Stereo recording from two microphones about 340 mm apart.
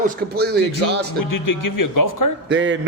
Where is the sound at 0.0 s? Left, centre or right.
Right.